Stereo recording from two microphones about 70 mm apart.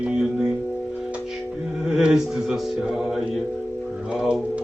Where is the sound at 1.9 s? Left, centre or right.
Centre.